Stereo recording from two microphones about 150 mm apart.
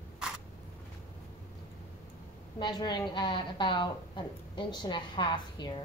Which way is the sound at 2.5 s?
30° left (ahead or behind).